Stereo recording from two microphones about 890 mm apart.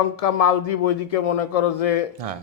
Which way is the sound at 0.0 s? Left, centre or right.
Left.